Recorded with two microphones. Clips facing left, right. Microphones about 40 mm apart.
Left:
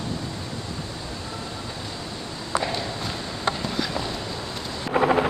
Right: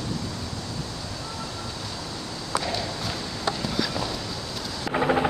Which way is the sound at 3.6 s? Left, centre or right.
Centre.